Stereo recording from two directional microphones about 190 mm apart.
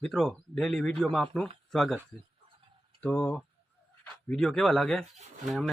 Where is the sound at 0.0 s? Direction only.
Centre (ahead or behind).